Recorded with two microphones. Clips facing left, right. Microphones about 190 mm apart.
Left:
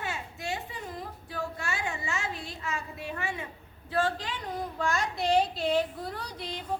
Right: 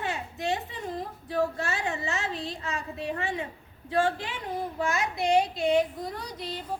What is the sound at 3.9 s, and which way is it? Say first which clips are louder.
Speech: right 3 dB; 10° right (ahead or behind).